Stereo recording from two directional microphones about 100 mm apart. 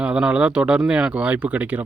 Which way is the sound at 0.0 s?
10° right (ahead or behind).